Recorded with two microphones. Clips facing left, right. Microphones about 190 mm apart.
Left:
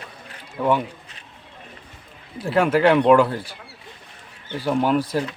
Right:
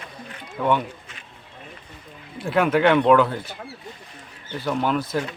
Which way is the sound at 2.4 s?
Centre (ahead or behind).